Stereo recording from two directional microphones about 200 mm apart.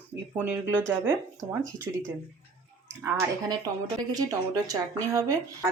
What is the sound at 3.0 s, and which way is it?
A woman's voice, 10° right (ahead or behind).